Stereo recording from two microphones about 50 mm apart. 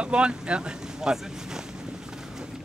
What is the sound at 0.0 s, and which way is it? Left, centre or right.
Speech, centre.